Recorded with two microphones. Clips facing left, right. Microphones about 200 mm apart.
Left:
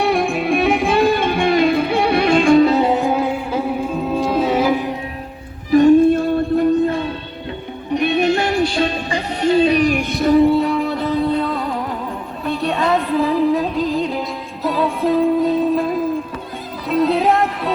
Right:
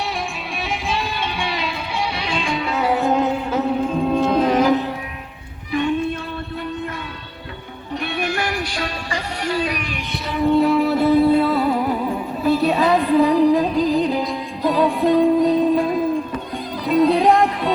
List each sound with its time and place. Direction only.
0.0 s music: 55° left (ahead or behind); by 2.8 s 40° left (ahead or behind)
2.8 s music: 20° left (ahead or behind)
3.1 s music: 10° left (ahead or behind)
5.7 s music: 45° left (ahead or behind)
7.9 s music: 20° left (ahead or behind)
9.8 s music: 45° left (ahead or behind)
10.5 s music: centre (ahead or behind)